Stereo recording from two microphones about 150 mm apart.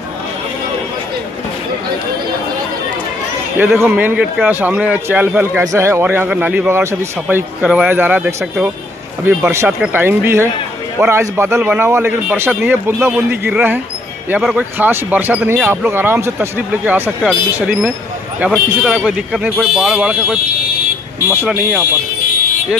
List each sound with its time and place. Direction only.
3.5 s speech: 15° right (ahead or behind)